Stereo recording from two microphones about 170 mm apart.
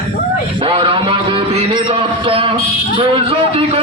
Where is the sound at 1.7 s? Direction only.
30° right (ahead or behind).